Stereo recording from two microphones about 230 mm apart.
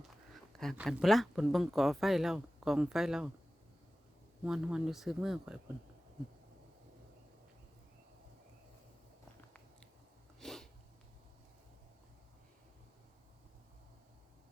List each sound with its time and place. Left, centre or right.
0.5 s speech: centre
4.4 s speech: centre
10.4 s sniff: centre